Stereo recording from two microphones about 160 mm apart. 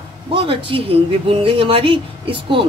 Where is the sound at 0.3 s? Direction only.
30° right (ahead or behind).